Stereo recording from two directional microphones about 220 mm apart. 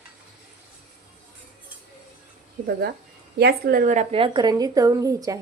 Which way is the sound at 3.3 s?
45° right (ahead or behind).